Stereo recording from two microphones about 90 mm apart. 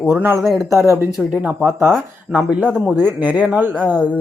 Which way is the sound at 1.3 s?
15° right (ahead or behind).